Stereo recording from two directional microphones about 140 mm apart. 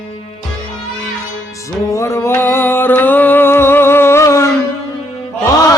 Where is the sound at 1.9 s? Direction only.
20° left (ahead or behind).